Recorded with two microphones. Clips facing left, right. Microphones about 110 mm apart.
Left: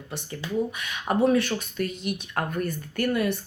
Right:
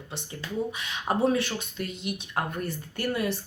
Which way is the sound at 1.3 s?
45° left (ahead or behind).